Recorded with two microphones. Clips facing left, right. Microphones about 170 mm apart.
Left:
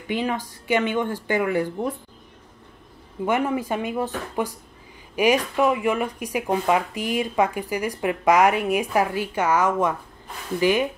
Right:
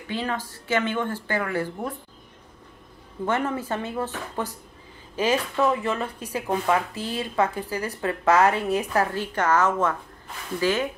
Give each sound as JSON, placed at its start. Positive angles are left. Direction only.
{"t": 0.1, "sound": "speech", "side_deg": 15}
{"t": 3.3, "sound": "speech", "side_deg": 15}